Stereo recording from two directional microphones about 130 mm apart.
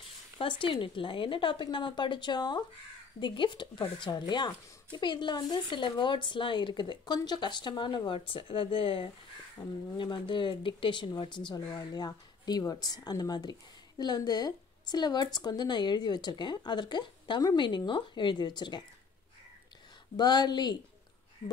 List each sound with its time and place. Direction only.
0.4 s speech: 40° left (ahead or behind)
20.2 s speech: 35° left (ahead or behind)